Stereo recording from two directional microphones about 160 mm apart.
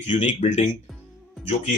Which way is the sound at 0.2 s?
45° left (ahead or behind).